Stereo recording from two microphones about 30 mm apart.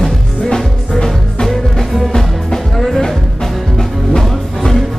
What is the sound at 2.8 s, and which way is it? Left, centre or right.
Music, centre.